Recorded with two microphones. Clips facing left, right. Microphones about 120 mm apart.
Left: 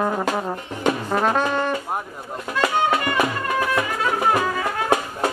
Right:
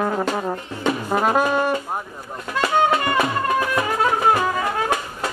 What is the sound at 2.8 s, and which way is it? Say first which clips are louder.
Music: right 1 dB; 30° right (ahead or behind).